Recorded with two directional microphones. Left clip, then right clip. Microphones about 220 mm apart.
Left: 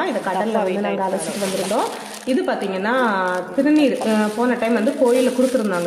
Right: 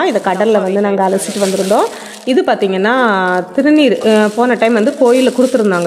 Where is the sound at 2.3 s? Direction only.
45° right (ahead or behind).